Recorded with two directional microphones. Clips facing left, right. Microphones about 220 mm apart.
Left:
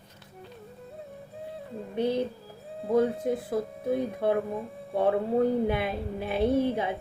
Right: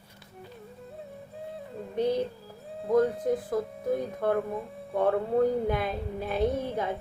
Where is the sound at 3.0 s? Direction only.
Centre (ahead or behind).